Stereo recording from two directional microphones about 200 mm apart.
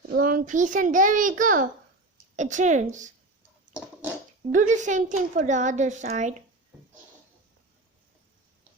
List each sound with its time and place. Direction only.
0.1 s a woman's voice: 45° right (ahead or behind)
4.5 s a woman's voice: 40° right (ahead or behind)